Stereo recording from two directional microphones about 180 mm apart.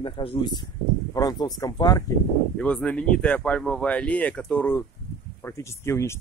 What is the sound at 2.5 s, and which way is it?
Speech, 5° left (ahead or behind).